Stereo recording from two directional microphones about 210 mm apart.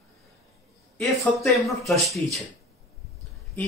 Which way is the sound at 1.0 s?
Centre (ahead or behind).